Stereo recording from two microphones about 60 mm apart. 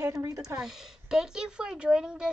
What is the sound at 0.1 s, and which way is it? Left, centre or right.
Speech, right.